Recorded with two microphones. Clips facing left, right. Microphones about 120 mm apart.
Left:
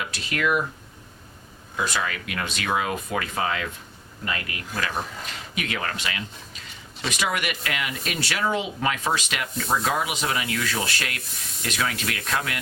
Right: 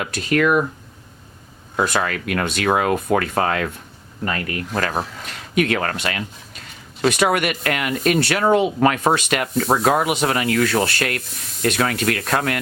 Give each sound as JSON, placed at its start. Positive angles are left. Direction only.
{"t": 0.0, "sound": "speech", "side_deg": -50}
{"t": 1.7, "sound": "speech", "side_deg": -55}
{"t": 4.3, "sound": "speech", "side_deg": -45}